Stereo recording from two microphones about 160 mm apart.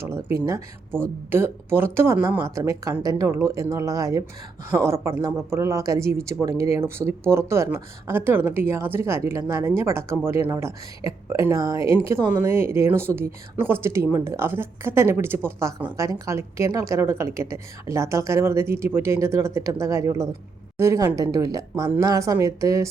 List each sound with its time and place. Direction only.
0.0 s speech: 15° right (ahead or behind)